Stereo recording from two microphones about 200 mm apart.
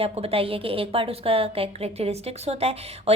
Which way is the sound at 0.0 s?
30° right (ahead or behind).